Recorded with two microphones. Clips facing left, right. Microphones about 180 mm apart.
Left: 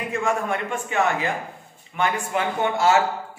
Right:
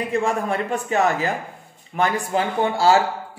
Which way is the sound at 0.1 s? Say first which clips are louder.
Right 1 dB; 35° right (ahead or behind).